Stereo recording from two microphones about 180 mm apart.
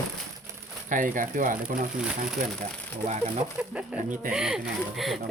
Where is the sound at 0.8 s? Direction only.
45° right (ahead or behind).